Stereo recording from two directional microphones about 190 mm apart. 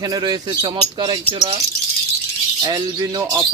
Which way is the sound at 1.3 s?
30° right (ahead or behind).